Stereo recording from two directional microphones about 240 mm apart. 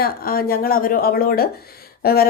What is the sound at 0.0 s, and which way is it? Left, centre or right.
A woman's voice, left.